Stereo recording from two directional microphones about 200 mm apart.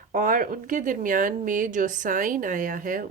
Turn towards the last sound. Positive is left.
turn(degrees=-40)  # may be behind; listen again after turning